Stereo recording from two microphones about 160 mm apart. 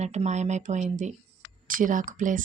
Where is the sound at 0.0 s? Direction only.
45° right (ahead or behind).